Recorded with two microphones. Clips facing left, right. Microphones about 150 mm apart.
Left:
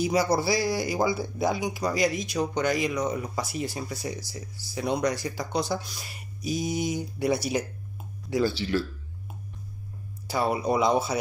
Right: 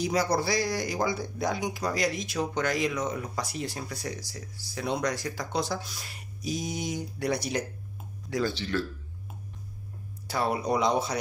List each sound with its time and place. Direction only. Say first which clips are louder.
0.0 s speech: left 3 dB; 5° left (ahead or behind)
10.2 s speech: left 2 dB; centre (ahead or behind)